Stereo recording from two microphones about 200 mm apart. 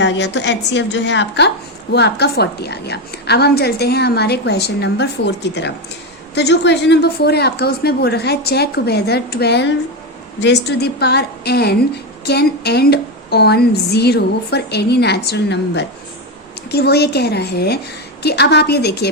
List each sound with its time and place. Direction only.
0.0 s a woman's voice: 60° left (ahead or behind)